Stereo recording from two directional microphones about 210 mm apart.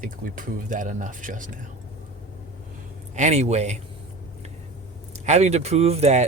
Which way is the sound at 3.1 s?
30° right (ahead or behind).